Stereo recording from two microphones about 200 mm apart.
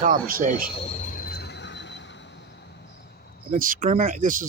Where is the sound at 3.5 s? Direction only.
45° right (ahead or behind).